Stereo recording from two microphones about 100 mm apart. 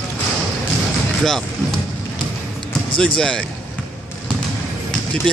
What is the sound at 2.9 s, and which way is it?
Speech, 10° left (ahead or behind).